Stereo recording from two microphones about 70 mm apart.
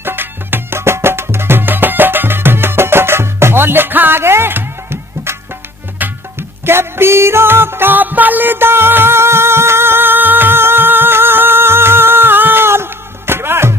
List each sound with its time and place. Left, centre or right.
0.0 s music: right
6.0 s music: right
6.7 s music: right